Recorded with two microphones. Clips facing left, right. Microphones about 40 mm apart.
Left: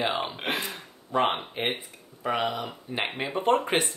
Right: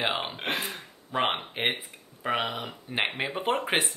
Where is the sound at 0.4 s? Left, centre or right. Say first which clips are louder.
Left 1 dB; centre.